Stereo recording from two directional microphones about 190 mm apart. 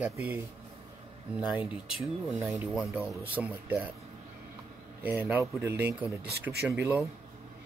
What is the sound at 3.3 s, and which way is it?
Cutlery, 10° right (ahead or behind).